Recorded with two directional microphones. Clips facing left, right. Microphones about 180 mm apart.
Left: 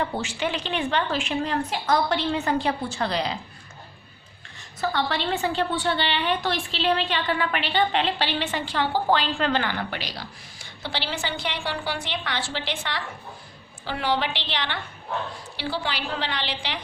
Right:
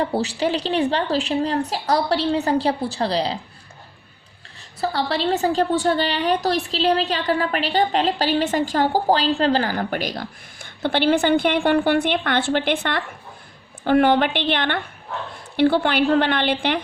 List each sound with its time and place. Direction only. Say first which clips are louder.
0.0 s a woman's voice: right 6 dB; 35° right (ahead or behind)
4.8 s a woman's voice: right 3 dB; 35° right (ahead or behind); by 16.8 s 55° right (ahead or behind)